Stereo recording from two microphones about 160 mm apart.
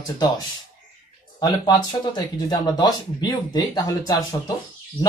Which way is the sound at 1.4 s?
25° left (ahead or behind).